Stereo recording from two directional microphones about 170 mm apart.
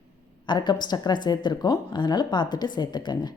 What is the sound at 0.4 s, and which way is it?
A woman's voice, 25° left (ahead or behind).